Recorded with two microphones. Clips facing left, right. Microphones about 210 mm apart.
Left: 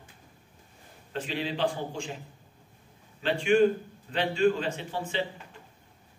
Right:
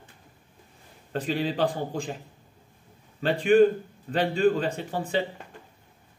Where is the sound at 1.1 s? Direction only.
40° right (ahead or behind).